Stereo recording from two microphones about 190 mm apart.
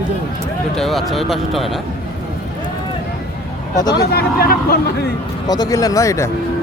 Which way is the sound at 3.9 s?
55° left (ahead or behind).